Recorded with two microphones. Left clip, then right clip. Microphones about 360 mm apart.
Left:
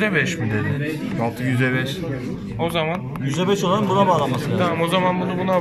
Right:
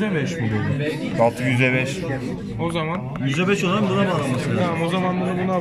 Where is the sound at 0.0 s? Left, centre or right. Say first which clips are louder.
Left 5 dB; left.